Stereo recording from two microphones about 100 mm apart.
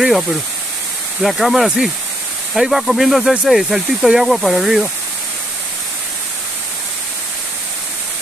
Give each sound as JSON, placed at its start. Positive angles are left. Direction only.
{"t": 0.0, "sound": "speech", "side_deg": -5}